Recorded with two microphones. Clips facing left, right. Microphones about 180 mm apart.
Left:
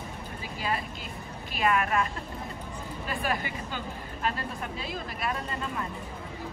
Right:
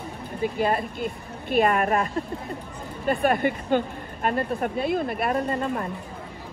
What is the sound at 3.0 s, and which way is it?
A woman's voice, 55° right (ahead or behind).